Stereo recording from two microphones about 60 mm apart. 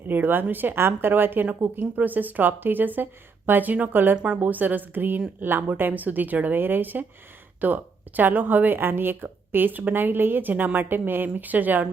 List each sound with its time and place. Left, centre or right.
0.1 s a woman's voice: right